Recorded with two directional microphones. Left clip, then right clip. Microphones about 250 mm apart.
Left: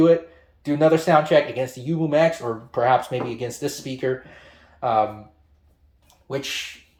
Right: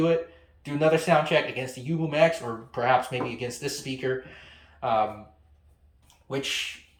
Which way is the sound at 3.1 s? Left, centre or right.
Left.